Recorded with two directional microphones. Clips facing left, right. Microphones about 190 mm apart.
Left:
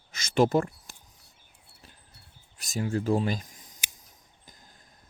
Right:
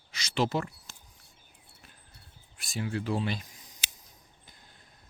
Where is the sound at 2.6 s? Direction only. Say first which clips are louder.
Left 4 dB; 40° left (ahead or behind).